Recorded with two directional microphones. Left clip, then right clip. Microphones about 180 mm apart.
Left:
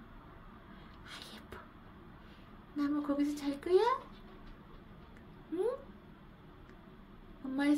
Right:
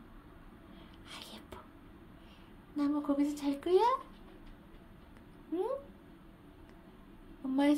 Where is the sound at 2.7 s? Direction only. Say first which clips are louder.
Right 2 dB; 15° right (ahead or behind).